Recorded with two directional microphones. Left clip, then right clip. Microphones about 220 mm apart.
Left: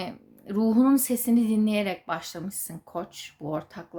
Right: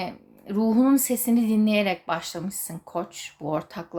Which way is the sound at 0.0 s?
10° left (ahead or behind).